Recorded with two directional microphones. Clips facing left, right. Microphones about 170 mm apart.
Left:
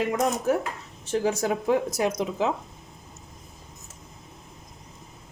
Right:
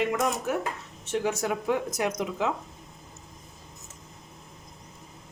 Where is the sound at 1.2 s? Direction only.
30° left (ahead or behind).